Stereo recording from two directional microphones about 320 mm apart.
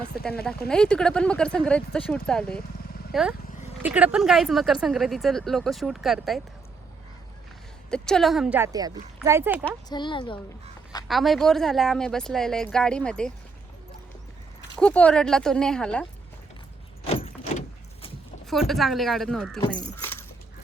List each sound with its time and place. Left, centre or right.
0.2 s speech: left
0.7 s speech: centre
7.9 s speech: centre
9.6 s a woman's voice: centre
11.1 s speech: centre
14.8 s speech: centre
17.2 s vehicle: centre
18.5 s speech: centre
19.5 s speech: centre